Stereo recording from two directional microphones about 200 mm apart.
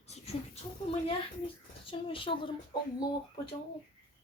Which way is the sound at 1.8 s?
25° left (ahead or behind).